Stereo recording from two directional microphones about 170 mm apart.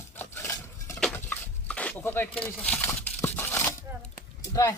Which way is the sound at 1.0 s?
10° left (ahead or behind).